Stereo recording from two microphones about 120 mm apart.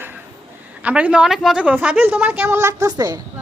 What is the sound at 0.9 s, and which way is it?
A woman's voice, 10° right (ahead or behind).